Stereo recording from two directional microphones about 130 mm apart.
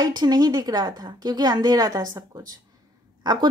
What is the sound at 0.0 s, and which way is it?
A woman's voice, 30° right (ahead or behind).